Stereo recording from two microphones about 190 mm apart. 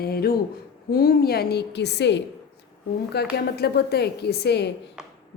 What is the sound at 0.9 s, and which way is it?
A woman's voice, 50° left (ahead or behind).